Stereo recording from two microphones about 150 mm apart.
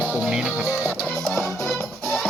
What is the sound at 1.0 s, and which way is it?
Music, 5° left (ahead or behind).